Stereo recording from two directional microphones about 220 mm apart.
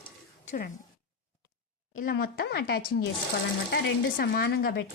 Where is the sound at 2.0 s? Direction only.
40° left (ahead or behind).